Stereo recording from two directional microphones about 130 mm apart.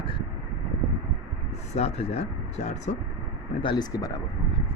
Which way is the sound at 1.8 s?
50° left (ahead or behind).